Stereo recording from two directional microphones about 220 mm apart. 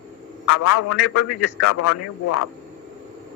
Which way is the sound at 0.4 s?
85° left.